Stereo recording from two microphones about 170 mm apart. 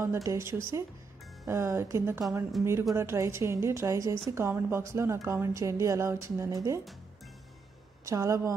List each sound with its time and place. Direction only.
0.0 s speech: 15° right (ahead or behind)
2.6 s speech: centre (ahead or behind)
3.0 s speech: 15° right (ahead or behind)
8.0 s speech: 20° right (ahead or behind)